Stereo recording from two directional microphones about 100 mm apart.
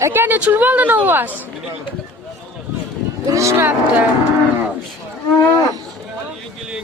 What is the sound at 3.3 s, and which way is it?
Speech, 30° right (ahead or behind).